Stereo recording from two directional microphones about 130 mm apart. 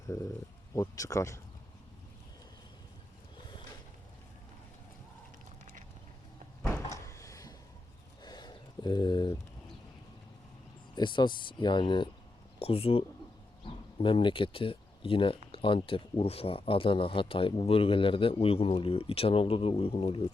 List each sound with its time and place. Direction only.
0.8 s speech: 25° left (ahead or behind)
6.9 s cupboard open or close: 25° left (ahead or behind)
8.2 s a sound: 30° left (ahead or behind)
10.9 s speech: 35° left (ahead or behind)
12.5 s speech: 50° left (ahead or behind)